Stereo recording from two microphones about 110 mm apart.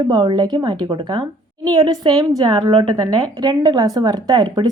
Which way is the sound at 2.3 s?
35° right (ahead or behind).